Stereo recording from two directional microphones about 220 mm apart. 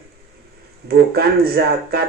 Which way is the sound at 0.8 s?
45° right (ahead or behind).